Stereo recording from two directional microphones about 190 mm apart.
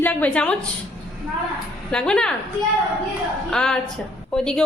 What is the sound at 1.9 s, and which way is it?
Speech, 5° left (ahead or behind).